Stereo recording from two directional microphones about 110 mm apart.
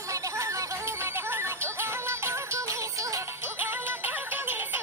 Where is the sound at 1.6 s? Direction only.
25° right (ahead or behind).